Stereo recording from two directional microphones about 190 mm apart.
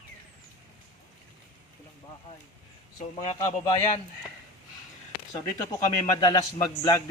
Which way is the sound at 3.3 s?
20° left (ahead or behind).